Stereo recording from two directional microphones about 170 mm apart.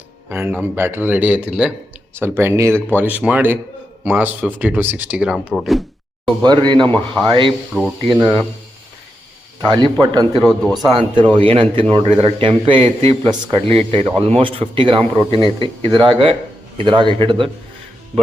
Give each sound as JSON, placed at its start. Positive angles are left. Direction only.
{"t": 0.3, "sound": "speech", "side_deg": -15}
{"t": 6.4, "sound": "speech", "side_deg": -25}
{"t": 6.9, "sound": "speech", "side_deg": 5}
{"t": 7.3, "sound": "speech", "side_deg": -30}
{"t": 9.6, "sound": "speech", "side_deg": -25}
{"t": 10.4, "sound": "speech", "side_deg": 5}
{"t": 10.9, "sound": "a man's voice", "side_deg": -30}